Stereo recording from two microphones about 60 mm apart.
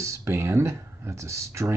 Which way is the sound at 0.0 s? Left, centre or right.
Right.